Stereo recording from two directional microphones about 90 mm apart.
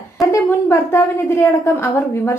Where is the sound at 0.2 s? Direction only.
30° left (ahead or behind).